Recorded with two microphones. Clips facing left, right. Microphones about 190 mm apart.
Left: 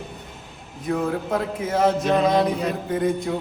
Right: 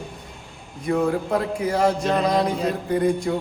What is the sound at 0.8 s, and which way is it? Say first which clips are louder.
A man's voice: right 3 dB; centre (ahead or behind).